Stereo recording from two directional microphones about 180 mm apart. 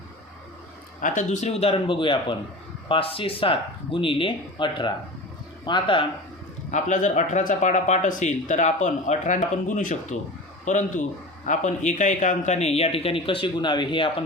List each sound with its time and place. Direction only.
1.0 s speech: 45° left (ahead or behind); by 6.1 s 25° left (ahead or behind)
6.7 s speech: 40° left (ahead or behind)